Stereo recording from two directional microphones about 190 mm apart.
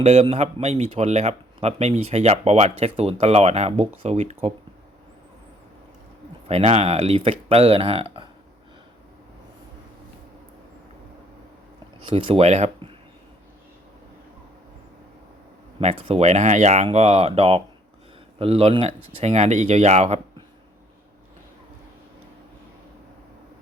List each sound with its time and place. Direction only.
0.0 s speech: 35° right (ahead or behind)
6.5 s speech: 35° right (ahead or behind)
12.0 s speech: 30° right (ahead or behind)
15.8 s speech: 35° right (ahead or behind)